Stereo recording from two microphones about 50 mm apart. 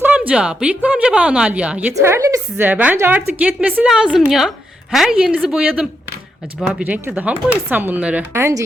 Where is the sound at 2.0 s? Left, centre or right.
Right.